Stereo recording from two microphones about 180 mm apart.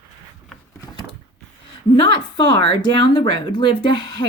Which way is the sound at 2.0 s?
25° left (ahead or behind).